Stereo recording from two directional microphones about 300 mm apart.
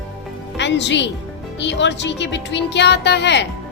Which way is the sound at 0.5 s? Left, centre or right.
Left.